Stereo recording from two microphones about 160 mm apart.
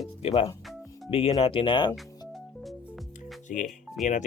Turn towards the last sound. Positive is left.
turn(degrees=50)  # may be behind; listen again after turning